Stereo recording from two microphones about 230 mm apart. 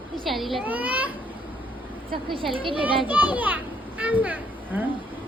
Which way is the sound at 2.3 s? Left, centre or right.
Right.